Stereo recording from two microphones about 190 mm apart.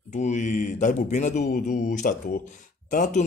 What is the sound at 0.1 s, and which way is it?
Speech, 40° left (ahead or behind).